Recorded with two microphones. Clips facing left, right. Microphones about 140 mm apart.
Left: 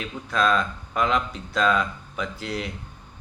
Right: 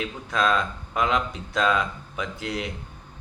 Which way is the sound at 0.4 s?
15° right (ahead or behind).